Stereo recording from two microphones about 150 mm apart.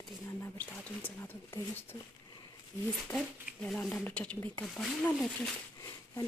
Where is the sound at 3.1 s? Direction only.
Centre (ahead or behind).